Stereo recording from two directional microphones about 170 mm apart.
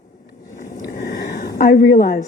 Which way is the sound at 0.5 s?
50° left (ahead or behind).